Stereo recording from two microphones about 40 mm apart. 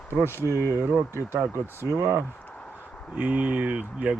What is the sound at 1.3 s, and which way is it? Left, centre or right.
Speech, right.